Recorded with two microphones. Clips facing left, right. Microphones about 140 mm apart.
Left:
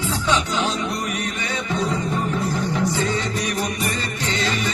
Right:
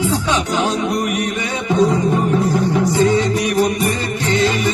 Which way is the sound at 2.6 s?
15° right (ahead or behind).